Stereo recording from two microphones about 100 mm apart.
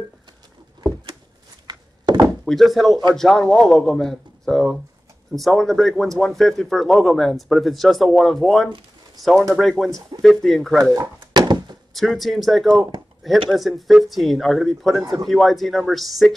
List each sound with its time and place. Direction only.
1.7 s thunk: 40° right (ahead or behind)
2.4 s speech: centre (ahead or behind)
10.8 s a sound: 45° right (ahead or behind)
11.9 s speech: centre (ahead or behind)